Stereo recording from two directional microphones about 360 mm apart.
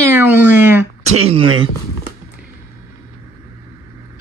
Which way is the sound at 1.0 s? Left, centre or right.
Centre.